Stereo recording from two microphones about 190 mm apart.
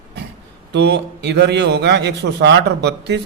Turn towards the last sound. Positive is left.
turn(degrees=-65)  # may be behind; listen again after turning